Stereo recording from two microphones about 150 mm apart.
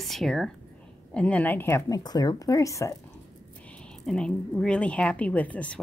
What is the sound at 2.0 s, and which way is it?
Speech, 25° left (ahead or behind).